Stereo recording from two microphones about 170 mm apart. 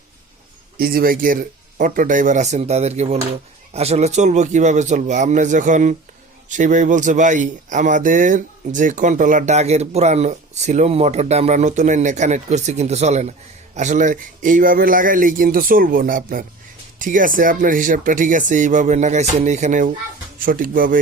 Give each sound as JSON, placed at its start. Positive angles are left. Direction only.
{"t": 0.8, "sound": "speech", "side_deg": -60}